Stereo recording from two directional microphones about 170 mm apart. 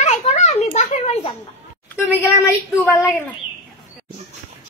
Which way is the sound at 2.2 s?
15° left (ahead or behind).